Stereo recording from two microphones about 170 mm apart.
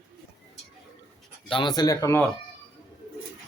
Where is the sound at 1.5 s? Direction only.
30° left (ahead or behind).